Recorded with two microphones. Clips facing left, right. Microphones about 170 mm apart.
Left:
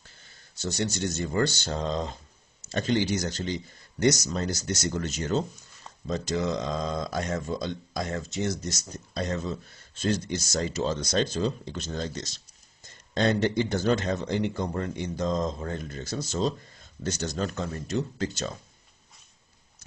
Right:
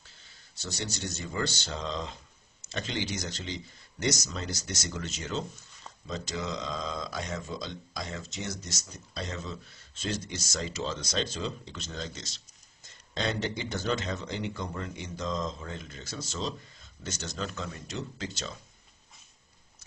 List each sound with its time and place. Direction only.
0.6 s speech: 50° left (ahead or behind)